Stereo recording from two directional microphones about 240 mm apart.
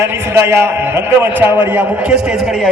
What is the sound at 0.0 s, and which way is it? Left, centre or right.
A man's voice, centre.